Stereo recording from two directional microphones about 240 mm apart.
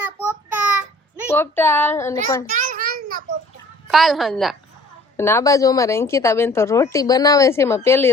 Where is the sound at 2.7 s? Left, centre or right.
Right.